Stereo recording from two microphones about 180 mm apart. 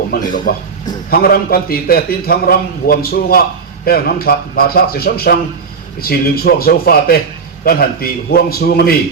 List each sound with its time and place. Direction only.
0.1 s a man's voice: 50° left (ahead or behind)